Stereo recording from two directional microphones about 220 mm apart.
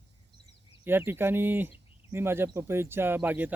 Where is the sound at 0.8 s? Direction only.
10° right (ahead or behind).